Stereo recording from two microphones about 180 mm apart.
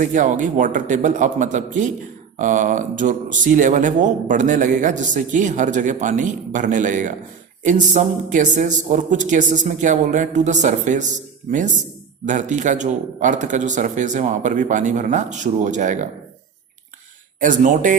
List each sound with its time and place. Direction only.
0.0 s speech: 45° right (ahead or behind)
17.4 s speech: 45° right (ahead or behind)